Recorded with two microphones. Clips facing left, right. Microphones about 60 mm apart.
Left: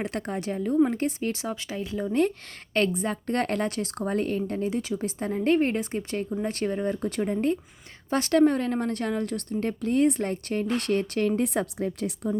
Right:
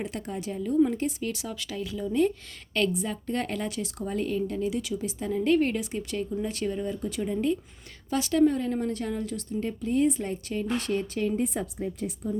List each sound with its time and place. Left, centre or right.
0.0 s a woman's voice: left
2.0 s a woman's voice: left